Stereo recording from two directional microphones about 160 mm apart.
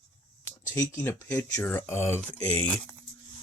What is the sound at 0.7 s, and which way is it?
Speech, 20° left (ahead or behind).